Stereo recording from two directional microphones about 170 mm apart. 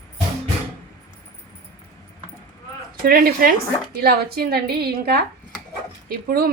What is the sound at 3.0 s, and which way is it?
A woman's voice, 60° right (ahead or behind).